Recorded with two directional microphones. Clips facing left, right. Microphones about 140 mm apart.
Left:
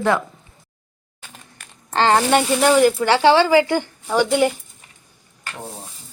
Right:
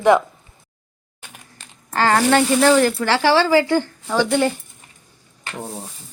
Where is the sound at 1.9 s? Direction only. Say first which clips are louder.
Even; 25° left (ahead or behind).